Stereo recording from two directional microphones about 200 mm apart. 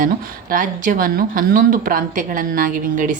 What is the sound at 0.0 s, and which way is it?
A woman's voice, 40° right (ahead or behind).